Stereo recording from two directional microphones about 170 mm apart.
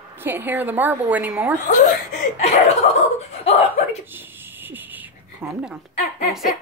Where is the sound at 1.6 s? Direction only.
45° left (ahead or behind).